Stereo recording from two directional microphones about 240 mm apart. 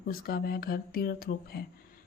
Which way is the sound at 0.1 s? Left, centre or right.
Left.